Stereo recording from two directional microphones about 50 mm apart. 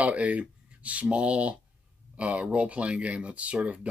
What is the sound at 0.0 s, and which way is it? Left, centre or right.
Speech, right.